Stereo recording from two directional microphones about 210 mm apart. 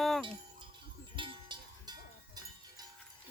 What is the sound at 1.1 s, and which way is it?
Cowbell, 25° right (ahead or behind).